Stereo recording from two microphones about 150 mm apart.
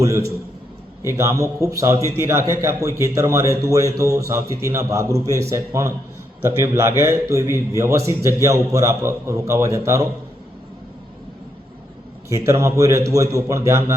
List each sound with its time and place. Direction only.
0.0 s a man's voice: 20° right (ahead or behind)
12.3 s a man's voice: 20° right (ahead or behind)